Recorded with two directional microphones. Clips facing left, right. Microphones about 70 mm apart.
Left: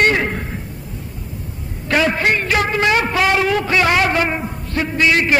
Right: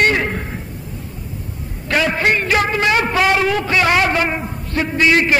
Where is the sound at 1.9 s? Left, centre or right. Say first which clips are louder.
Even; centre.